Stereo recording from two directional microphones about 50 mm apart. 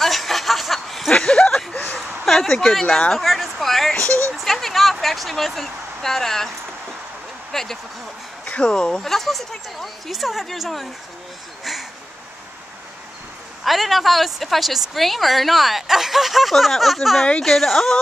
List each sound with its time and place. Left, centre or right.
0.0 s chuckle: centre
2.2 s speech: centre
3.2 s a woman's voice: centre
7.5 s speech: centre
8.5 s speech: left
9.0 s a woman's voice: centre
13.7 s a woman's voice: centre